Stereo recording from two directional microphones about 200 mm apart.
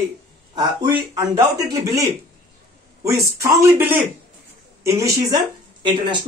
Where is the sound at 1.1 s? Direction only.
20° right (ahead or behind).